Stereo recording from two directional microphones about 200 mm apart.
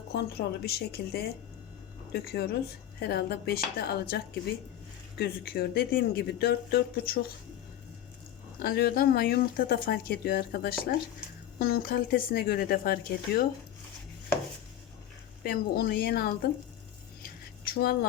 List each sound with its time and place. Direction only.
0.1 s speech: 55° left (ahead or behind)
8.5 s speech: 50° left (ahead or behind)
15.4 s speech: 50° left (ahead or behind)
17.7 s a sound: 50° left (ahead or behind)